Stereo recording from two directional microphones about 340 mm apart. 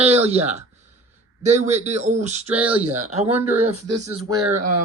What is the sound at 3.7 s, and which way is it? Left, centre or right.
Speech, right.